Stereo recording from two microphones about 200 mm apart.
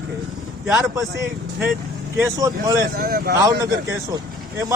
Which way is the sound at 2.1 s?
15° right (ahead or behind).